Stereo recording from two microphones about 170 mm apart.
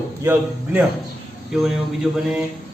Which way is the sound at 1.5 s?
5° right (ahead or behind).